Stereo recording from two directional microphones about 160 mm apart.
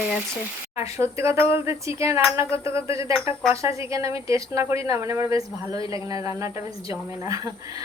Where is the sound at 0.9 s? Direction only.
15° right (ahead or behind).